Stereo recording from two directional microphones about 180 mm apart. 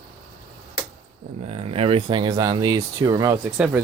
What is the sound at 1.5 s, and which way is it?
Speech, 35° right (ahead or behind).